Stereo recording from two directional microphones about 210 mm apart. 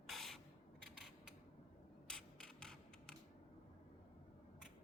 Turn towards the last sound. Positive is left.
turn(degrees=5)  # may be behind; listen again after turning